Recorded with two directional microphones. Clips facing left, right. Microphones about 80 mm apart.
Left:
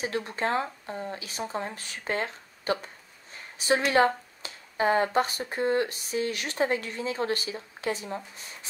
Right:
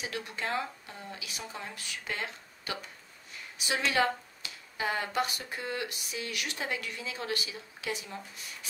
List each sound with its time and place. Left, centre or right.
0.0 s speech: left
3.3 s a sound: left
3.9 s speech: left